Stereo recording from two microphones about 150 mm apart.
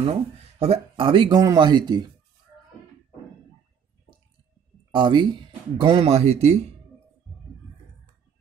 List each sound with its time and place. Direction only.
0.0 s speech: 40° right (ahead or behind)
4.9 s speech: 30° right (ahead or behind)